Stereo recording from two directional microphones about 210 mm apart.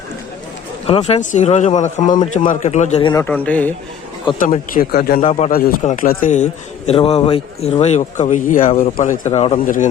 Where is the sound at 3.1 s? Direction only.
10° left (ahead or behind).